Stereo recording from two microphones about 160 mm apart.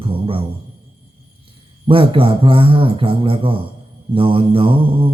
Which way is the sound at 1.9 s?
35° right (ahead or behind).